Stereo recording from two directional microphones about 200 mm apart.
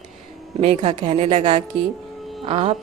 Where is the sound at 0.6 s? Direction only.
30° right (ahead or behind).